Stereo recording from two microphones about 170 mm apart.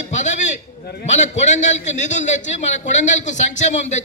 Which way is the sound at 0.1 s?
45° left (ahead or behind).